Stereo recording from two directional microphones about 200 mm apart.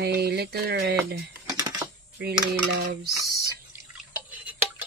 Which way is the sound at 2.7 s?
50° right (ahead or behind).